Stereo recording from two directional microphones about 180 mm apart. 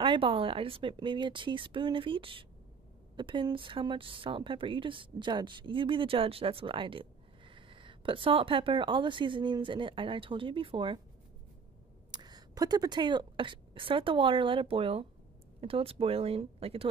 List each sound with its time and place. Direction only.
0.0 s a woman's voice: 30° right (ahead or behind)
12.1 s speech: 20° right (ahead or behind)